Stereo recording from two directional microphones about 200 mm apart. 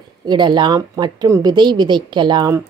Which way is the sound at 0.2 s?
20° right (ahead or behind).